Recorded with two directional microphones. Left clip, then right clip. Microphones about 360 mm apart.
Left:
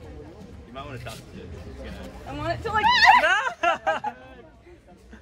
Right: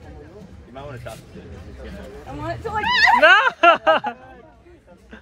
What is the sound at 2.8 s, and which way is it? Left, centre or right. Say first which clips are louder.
Speech: right 1 dB; left.